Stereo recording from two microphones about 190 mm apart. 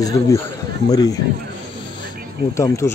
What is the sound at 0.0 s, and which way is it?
A man's voice, 15° left (ahead or behind).